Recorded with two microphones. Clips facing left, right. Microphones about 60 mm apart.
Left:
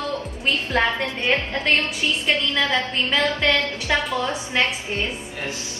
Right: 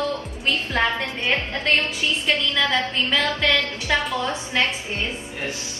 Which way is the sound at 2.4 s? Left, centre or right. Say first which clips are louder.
Even; left.